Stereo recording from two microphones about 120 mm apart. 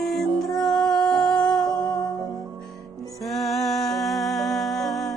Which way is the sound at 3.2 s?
Centre (ahead or behind).